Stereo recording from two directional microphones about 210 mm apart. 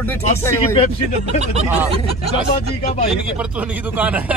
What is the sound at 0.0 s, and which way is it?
Speech, 10° left (ahead or behind).